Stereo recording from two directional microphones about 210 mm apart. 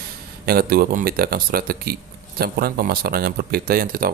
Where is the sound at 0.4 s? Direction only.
45° right (ahead or behind).